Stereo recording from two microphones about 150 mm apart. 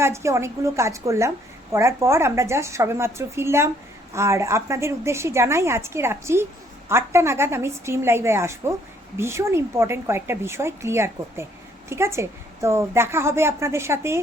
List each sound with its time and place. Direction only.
0.0 s a woman's voice: 20° right (ahead or behind)